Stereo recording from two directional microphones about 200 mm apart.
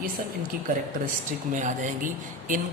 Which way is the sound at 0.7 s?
40° right (ahead or behind).